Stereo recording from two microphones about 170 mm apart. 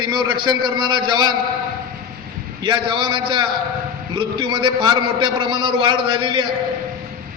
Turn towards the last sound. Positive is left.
turn(degrees=-30)  # may be behind; listen again after turning